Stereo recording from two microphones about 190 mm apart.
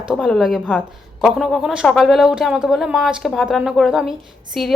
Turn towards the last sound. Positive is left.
turn(degrees=0)  # may be behind; listen again after turning